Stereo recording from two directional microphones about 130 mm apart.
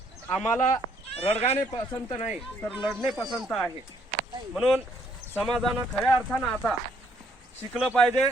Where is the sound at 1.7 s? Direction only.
35° left (ahead or behind).